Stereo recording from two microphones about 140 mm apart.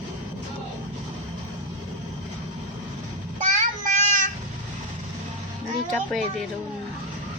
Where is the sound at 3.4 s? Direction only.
60° right (ahead or behind).